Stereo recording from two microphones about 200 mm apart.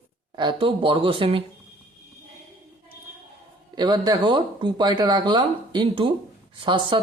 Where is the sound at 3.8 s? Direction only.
20° right (ahead or behind).